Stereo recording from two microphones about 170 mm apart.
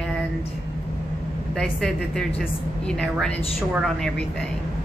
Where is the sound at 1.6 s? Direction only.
5° left (ahead or behind).